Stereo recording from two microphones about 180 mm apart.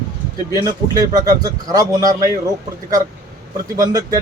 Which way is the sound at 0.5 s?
20° right (ahead or behind).